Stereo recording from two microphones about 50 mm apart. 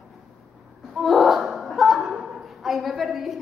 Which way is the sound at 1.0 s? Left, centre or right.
Centre.